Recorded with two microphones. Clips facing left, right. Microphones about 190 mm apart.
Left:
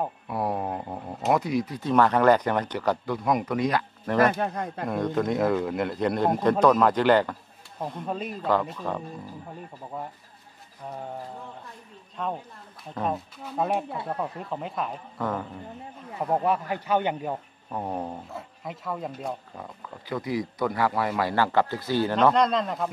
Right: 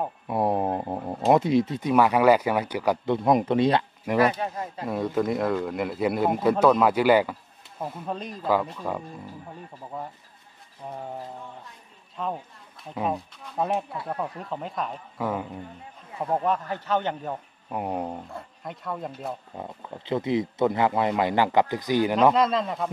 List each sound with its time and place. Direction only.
0.3 s a sound: 25° right (ahead or behind)
1.9 s speech: 10° right (ahead or behind)
3.1 s a man's voice: 25° right (ahead or behind)
4.0 s speech: 10° right (ahead or behind)
4.3 s speech: 55° left (ahead or behind)
4.8 s speech: 5° right (ahead or behind)
12.2 s speech: centre (ahead or behind)
16.3 s a man's voice: 10° left (ahead or behind)
17.6 s speech: 10° right (ahead or behind)
18.3 s speech: centre (ahead or behind)
19.5 s speech: 25° right (ahead or behind); by 22.8 s centre (ahead or behind)